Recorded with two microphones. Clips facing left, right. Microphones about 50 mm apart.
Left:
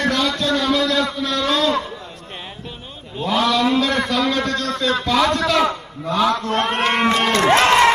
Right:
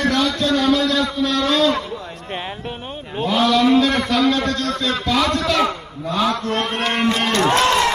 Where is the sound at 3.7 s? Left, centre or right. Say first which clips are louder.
Right 3 dB; right.